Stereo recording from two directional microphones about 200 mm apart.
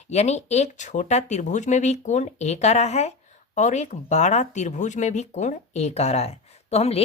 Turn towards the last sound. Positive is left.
turn(degrees=30)  # may be behind; listen again after turning